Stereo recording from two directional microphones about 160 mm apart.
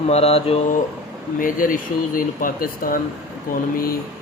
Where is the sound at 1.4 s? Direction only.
60° left (ahead or behind).